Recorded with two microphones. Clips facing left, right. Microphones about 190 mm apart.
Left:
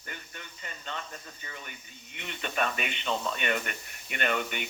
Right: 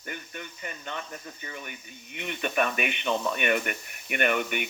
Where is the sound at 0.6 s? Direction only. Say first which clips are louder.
Right 2 dB; 15° right (ahead or behind).